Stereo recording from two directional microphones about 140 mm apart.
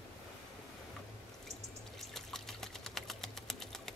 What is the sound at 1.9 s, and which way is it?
Water, centre (ahead or behind).